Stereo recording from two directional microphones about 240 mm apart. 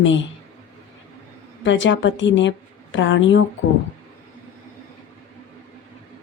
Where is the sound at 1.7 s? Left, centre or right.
Left.